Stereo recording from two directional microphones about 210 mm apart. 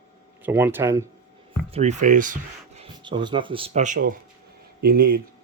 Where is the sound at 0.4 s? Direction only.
10° right (ahead or behind).